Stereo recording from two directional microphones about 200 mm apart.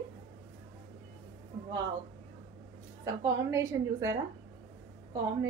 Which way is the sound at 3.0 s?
15° right (ahead or behind).